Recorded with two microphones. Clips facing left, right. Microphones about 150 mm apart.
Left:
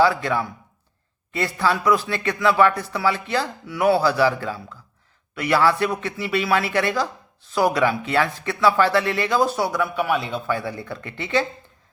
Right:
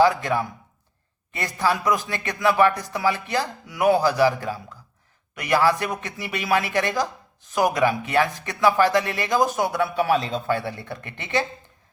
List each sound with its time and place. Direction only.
0.0 s speech: 20° right (ahead or behind)
9.9 s a man's voice: 30° right (ahead or behind)